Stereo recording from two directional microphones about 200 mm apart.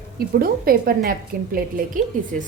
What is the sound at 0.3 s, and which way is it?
A woman's voice, 50° right (ahead or behind).